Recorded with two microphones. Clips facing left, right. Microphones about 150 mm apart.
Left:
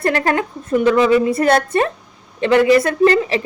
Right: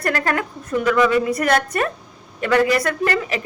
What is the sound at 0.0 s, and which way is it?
Speech, 25° left (ahead or behind).